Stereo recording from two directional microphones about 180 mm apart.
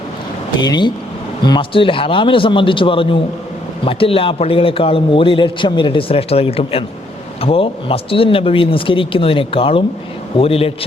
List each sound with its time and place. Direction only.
0.6 s a man's voice: 25° left (ahead or behind)